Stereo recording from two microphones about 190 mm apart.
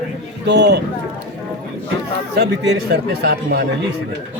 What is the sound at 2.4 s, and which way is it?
Speech, 65° right (ahead or behind).